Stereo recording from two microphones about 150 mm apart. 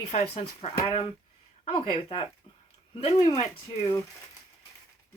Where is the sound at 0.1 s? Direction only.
50° left (ahead or behind).